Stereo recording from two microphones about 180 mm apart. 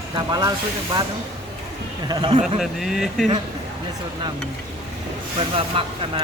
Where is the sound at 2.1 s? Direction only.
25° right (ahead or behind).